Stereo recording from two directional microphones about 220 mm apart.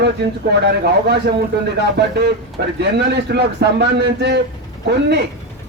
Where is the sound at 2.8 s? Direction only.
50° right (ahead or behind).